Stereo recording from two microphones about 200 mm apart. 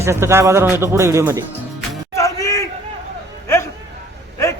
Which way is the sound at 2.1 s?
15° left (ahead or behind).